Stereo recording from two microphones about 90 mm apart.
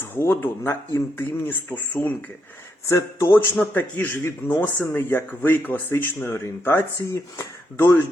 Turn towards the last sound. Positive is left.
turn(degrees=30)  # may be behind; listen again after turning